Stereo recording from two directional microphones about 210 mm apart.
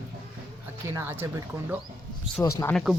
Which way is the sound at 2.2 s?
30° right (ahead or behind).